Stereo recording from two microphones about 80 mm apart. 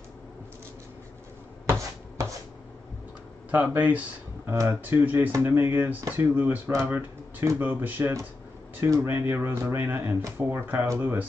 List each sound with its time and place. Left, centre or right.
1.7 s chopping: right
3.5 s speech: centre
6.7 s speech: right
7.5 s speech: right